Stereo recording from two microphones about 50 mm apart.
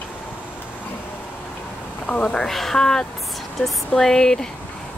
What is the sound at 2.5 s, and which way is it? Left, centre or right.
Speech, centre.